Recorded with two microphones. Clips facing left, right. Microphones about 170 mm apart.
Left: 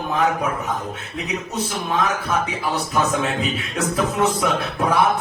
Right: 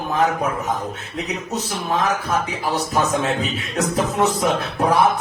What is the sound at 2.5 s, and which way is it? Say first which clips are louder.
Speech: right 1 dB; 35° right (ahead or behind).